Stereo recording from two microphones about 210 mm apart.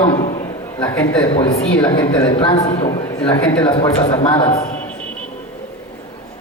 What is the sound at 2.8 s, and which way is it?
Speech, 15° left (ahead or behind).